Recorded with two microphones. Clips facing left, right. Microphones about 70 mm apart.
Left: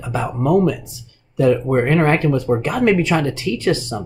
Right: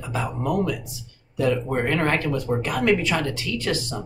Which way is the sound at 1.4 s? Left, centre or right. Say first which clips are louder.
Left 7 dB; left.